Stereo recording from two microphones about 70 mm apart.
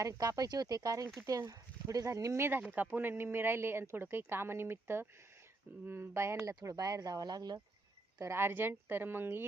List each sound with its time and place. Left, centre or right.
0.0 s speech: right
6.7 s speech: right
8.2 s speech: right